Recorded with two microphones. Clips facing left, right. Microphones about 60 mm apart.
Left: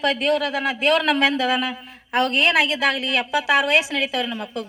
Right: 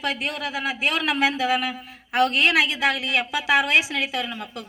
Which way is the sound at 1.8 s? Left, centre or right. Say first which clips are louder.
Right 2 dB; left.